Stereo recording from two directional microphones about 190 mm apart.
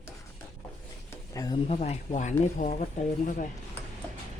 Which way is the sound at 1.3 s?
20° left (ahead or behind).